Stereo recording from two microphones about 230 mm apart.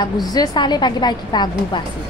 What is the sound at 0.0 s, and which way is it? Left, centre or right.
A woman's voice, centre.